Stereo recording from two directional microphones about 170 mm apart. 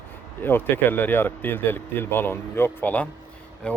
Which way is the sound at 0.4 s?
10° left (ahead or behind).